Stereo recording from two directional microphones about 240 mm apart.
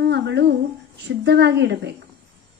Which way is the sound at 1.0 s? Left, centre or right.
Right.